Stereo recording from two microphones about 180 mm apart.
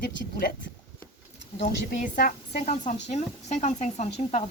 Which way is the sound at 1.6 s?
45° left (ahead or behind).